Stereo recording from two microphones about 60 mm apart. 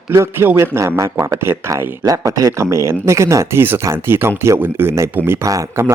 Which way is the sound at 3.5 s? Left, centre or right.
Right.